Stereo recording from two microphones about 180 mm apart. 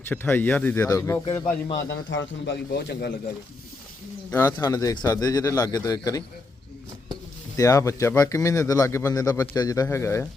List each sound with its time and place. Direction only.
0.1 s speech: 10° left (ahead or behind)
1.9 s a man's voice: 90° left; by 3.1 s 70° left (ahead or behind)
4.3 s speech: 10° left (ahead or behind)
7.5 s speech: 20° left (ahead or behind)